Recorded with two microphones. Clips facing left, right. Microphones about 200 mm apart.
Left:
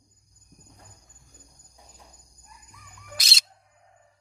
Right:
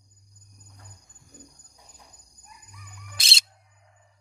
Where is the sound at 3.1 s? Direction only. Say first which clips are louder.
Left 2 dB; 30° right (ahead or behind).